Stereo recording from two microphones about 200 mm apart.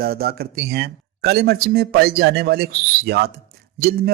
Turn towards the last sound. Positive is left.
turn(degrees=-50)  # may be behind; listen again after turning